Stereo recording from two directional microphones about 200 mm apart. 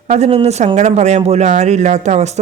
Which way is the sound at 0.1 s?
30° right (ahead or behind).